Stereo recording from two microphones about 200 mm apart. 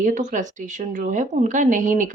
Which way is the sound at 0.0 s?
40° right (ahead or behind).